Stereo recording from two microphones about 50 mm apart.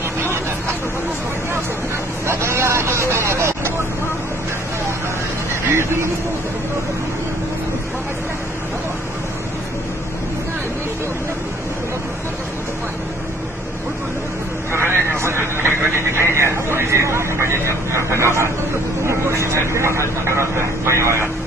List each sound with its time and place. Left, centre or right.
2.2 s vehicle: right
5.7 s speech: right
14.7 s vehicle: right